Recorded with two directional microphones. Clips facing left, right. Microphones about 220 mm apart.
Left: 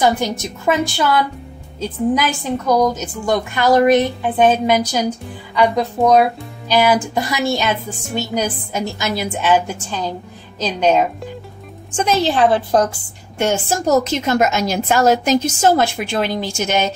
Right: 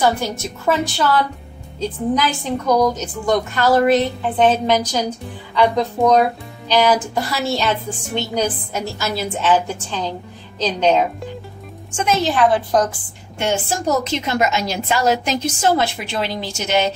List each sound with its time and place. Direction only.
0.0 s a woman's voice: 15° left (ahead or behind)
12.0 s a woman's voice: 35° left (ahead or behind)
13.4 s a woman's voice: 45° left (ahead or behind)